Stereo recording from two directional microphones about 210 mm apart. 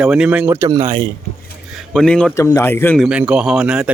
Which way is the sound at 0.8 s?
40° right (ahead or behind).